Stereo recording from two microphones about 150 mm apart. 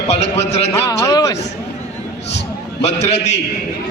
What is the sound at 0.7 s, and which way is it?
Speech, 20° left (ahead or behind).